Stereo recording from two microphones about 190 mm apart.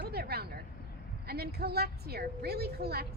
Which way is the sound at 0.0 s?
55° right (ahead or behind).